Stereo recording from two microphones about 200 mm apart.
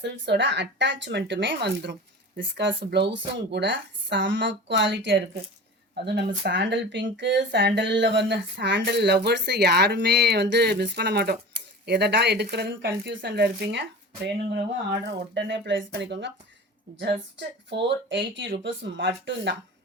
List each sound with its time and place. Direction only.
0.0 s speech: 60° right (ahead or behind)
17.7 s speech: 60° right (ahead or behind)